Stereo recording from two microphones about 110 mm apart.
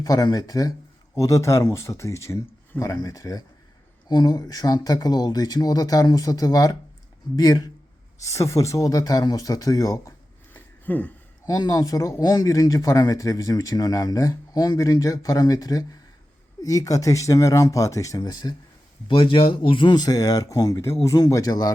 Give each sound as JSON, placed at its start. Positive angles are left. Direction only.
{"t": 0.0, "sound": "speech", "side_deg": 35}
{"t": 10.5, "sound": "a sound", "side_deg": 15}
{"t": 11.4, "sound": "speech", "side_deg": 35}